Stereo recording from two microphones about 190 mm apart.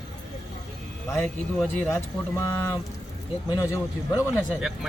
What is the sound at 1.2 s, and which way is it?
Speech, centre (ahead or behind).